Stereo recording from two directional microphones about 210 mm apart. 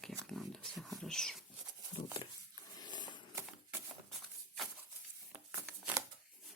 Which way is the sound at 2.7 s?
20° left (ahead or behind).